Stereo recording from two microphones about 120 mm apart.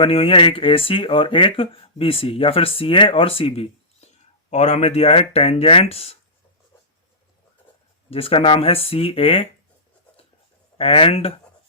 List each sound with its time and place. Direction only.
0.0 s speech: 50° left (ahead or behind)
4.5 s speech: 70° left (ahead or behind)
8.1 s speech: 50° left (ahead or behind)
10.8 s speech: 50° left (ahead or behind)